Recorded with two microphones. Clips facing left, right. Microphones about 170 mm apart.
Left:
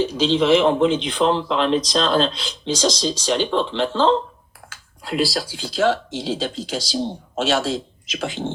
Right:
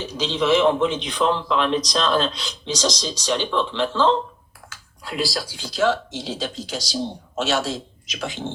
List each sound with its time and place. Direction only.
0.2 s speech: 30° left (ahead or behind)
5.1 s speech: 30° left (ahead or behind)